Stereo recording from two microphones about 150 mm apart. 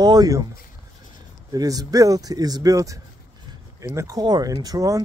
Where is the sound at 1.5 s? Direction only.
25° right (ahead or behind).